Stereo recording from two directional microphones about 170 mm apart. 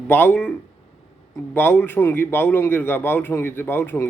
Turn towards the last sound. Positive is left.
turn(degrees=10)  # may be behind; listen again after turning